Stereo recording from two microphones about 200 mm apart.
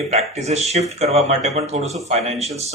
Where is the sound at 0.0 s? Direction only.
30° right (ahead or behind).